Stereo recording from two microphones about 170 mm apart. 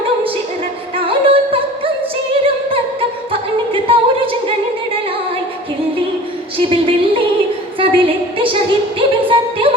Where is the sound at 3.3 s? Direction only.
30° right (ahead or behind).